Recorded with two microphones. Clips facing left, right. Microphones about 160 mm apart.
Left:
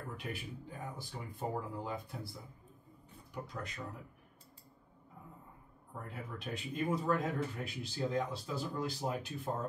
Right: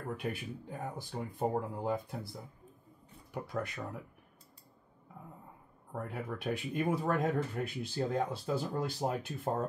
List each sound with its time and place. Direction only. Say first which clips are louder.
0.2 s speech: right 5 dB; 55° right (ahead or behind)
3.4 s speech: right 7 dB; 60° right (ahead or behind)
5.9 s speech: right 6 dB; 60° right (ahead or behind)